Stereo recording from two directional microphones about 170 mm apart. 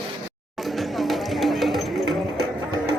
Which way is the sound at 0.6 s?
Centre (ahead or behind).